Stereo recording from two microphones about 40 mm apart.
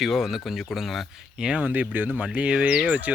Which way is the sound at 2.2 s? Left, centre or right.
Right.